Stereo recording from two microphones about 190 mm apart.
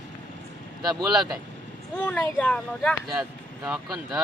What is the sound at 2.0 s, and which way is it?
Speech, 10° left (ahead or behind).